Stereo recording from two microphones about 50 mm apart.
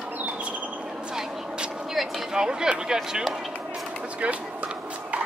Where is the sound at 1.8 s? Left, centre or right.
Centre.